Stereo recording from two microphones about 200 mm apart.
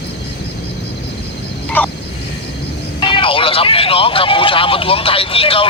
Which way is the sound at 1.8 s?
10° left (ahead or behind).